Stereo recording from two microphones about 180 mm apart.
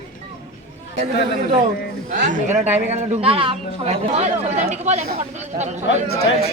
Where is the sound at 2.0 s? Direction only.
45° right (ahead or behind).